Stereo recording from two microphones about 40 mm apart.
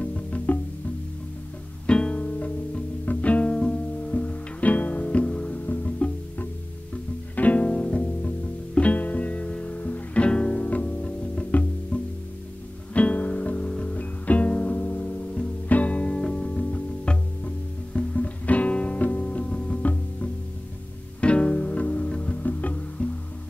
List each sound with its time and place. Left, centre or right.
0.0 s music: left
1.9 s music: left
3.4 s music: left
4.0 s music: left
5.7 s music: left
7.3 s music: left
7.6 s music: left
10.2 s music: left
10.6 s music: left
16.4 s music: left
18.1 s music: left
21.2 s music: left
22.4 s music: left